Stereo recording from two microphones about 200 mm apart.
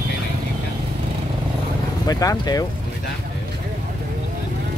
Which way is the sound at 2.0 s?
20° left (ahead or behind).